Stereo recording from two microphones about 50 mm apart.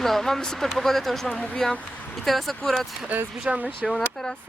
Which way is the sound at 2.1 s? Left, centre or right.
Centre.